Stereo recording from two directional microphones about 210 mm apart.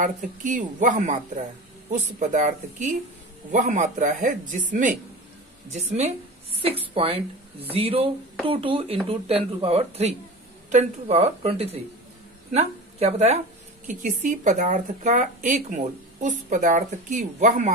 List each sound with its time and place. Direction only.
0.0 s a woman's voice: 40° right (ahead or behind)